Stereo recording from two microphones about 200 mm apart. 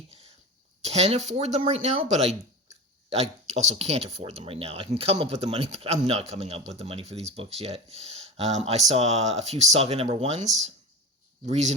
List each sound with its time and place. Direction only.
0.8 s speech: 30° right (ahead or behind)